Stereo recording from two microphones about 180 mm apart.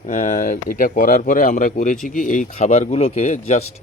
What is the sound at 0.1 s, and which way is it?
Speech, 45° left (ahead or behind).